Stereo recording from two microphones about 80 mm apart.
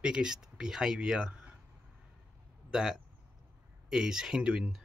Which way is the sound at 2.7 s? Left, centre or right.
Centre.